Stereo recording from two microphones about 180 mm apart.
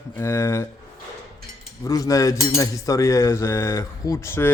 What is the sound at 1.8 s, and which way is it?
A man's voice, 20° left (ahead or behind).